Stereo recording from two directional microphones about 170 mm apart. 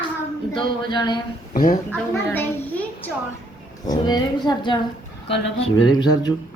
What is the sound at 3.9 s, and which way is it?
Speech, 25° left (ahead or behind).